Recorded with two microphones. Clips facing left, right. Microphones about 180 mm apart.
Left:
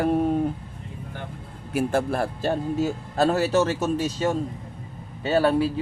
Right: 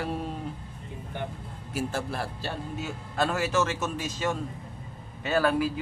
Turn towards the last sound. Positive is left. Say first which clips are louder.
# left 4 dB
turn(degrees=30)  # may be behind; listen again after turning